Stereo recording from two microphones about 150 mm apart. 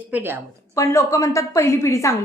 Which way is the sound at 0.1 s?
15° right (ahead or behind).